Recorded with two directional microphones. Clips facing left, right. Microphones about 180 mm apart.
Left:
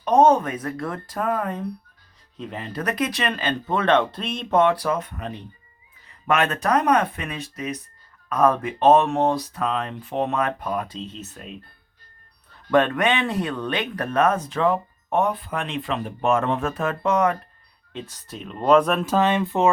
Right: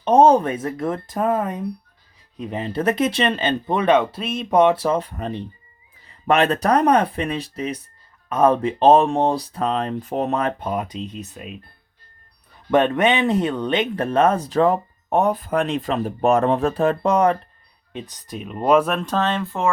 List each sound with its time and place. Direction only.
0.0 s speech: 30° right (ahead or behind); by 4.4 s 5° right (ahead or behind)
4.5 s speech: 20° right (ahead or behind)
17.9 s speech: 15° right (ahead or behind); by 19.7 s 20° left (ahead or behind)